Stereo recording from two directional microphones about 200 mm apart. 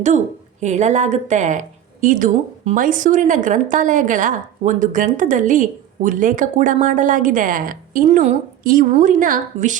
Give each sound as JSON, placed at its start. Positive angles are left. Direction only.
{"t": 0.6, "sound": "a woman's voice", "side_deg": -35}